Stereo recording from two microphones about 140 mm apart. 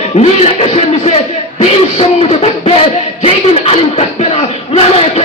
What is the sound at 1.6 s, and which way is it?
Music, 45° left (ahead or behind).